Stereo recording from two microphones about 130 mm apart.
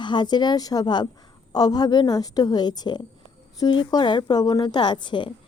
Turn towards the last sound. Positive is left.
turn(degrees=40)  # may be behind; listen again after turning